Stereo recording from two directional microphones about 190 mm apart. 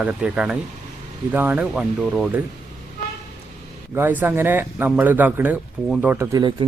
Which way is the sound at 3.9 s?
10° right (ahead or behind).